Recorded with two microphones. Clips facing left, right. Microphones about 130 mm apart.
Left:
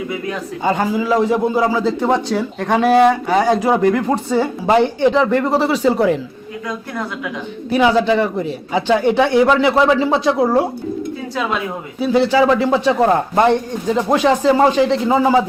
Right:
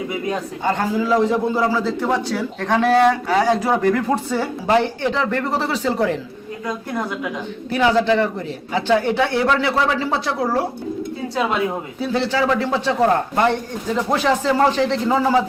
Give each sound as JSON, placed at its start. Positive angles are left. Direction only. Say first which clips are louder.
{"t": 0.6, "sound": "a man's voice", "louder": "left 3 dB", "side_deg": 10}
{"t": 7.7, "sound": "a man's voice", "louder": "left 3 dB", "side_deg": 15}
{"t": 11.9, "sound": "a man's voice", "louder": "left 8 dB", "side_deg": 15}